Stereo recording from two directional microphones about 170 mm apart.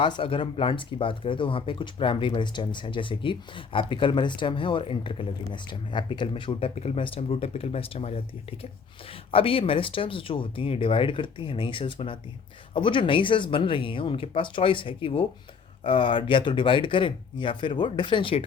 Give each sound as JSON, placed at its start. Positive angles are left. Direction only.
{"t": 0.0, "sound": "speech", "side_deg": 30}